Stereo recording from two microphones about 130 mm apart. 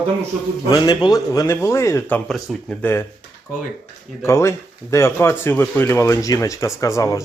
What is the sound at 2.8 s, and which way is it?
Speech, 15° left (ahead or behind).